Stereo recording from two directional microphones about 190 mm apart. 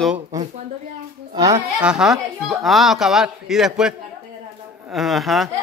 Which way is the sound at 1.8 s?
5° right (ahead or behind).